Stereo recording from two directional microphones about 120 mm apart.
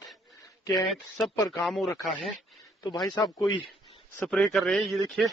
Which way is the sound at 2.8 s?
35° left (ahead or behind).